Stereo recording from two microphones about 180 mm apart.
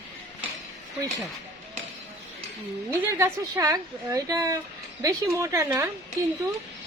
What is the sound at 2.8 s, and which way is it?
A woman's voice, 15° right (ahead or behind).